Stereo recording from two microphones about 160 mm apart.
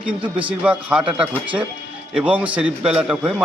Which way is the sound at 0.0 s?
10° right (ahead or behind).